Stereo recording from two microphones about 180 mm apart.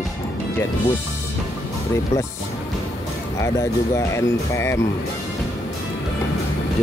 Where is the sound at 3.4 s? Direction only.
15° left (ahead or behind).